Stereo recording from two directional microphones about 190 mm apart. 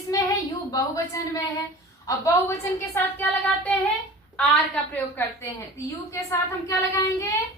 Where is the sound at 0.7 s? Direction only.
15° left (ahead or behind).